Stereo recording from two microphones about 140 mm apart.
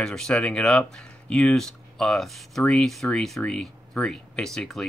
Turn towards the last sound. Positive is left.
turn(degrees=0)  # may be behind; listen again after turning